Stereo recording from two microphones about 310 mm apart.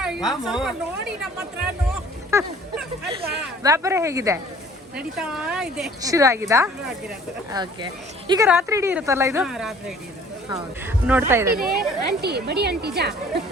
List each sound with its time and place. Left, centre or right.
0.0 s a woman's voice: centre
2.3 s speech: centre
11.8 s a woman's voice: right